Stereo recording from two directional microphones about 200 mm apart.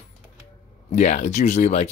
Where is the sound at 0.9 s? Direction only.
35° left (ahead or behind).